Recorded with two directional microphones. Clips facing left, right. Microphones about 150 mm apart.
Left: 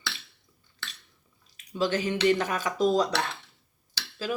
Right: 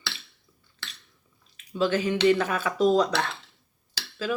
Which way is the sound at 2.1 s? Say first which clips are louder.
Right 3 dB; 25° right (ahead or behind).